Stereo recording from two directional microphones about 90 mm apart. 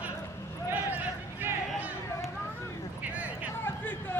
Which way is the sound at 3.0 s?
15° right (ahead or behind).